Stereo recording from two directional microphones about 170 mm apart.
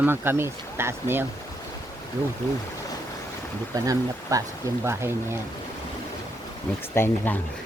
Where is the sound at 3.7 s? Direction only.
20° right (ahead or behind).